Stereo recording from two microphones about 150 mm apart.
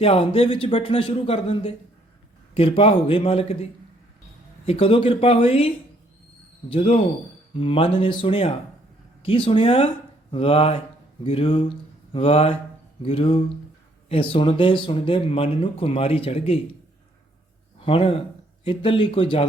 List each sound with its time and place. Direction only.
0.0 s speech: 40° left (ahead or behind)
17.7 s a man's voice: 35° left (ahead or behind)